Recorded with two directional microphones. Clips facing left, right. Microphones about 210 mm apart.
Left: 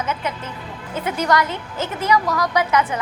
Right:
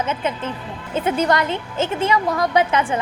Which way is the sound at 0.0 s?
25° right (ahead or behind).